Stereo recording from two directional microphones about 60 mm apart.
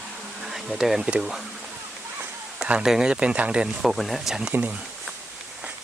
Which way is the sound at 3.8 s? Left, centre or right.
Centre.